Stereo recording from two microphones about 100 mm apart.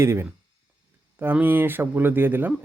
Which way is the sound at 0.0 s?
25° right (ahead or behind).